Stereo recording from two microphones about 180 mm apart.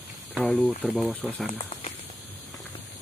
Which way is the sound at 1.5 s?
35° left (ahead or behind).